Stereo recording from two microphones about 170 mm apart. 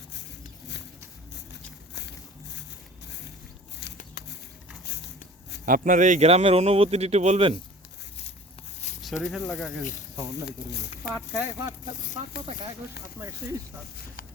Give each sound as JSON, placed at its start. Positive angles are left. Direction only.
{"t": 2.0, "sound": "a sound", "side_deg": 90}
{"t": 5.6, "sound": "a man's voice", "side_deg": -55}
{"t": 9.2, "sound": "speech", "side_deg": 0}
{"t": 10.3, "sound": "speech", "side_deg": 75}
{"t": 11.1, "sound": "speech", "side_deg": -5}